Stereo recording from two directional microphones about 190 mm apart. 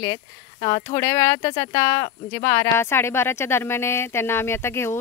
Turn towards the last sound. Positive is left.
turn(degrees=15)  # may be behind; listen again after turning